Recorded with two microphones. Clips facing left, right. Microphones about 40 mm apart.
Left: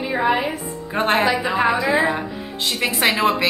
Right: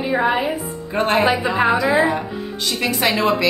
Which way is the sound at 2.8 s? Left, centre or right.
Left.